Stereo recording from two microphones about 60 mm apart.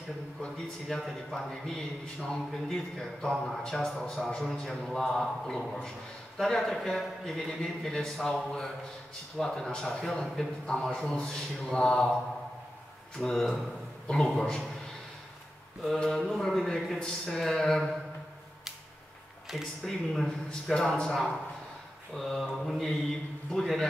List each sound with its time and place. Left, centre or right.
0.8 s a man's voice: centre
13.2 s speech: centre
14.0 s a man's voice: centre
16.0 s a man's voice: centre
19.5 s a man's voice: centre
21.1 s speech: centre